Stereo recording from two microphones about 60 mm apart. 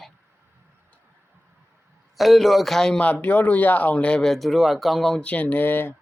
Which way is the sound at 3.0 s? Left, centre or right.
Left.